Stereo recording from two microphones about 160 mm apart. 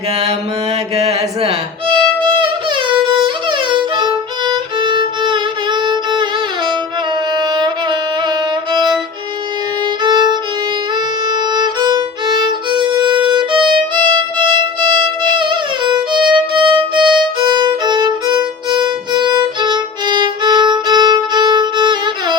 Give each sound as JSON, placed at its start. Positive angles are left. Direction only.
{"t": 0.9, "sound": "music", "side_deg": -40}
{"t": 3.2, "sound": "violin", "side_deg": -30}
{"t": 7.3, "sound": "music", "side_deg": -25}
{"t": 10.0, "sound": "violin", "side_deg": -25}
{"t": 15.2, "sound": "music", "side_deg": -30}